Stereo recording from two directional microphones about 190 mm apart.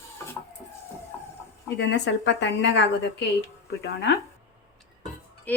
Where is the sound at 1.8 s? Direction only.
65° left (ahead or behind).